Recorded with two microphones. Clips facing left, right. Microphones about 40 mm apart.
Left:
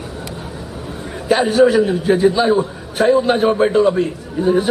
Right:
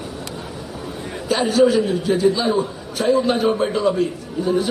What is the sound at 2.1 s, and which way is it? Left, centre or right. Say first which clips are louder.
A man's voice: left 4 dB; left.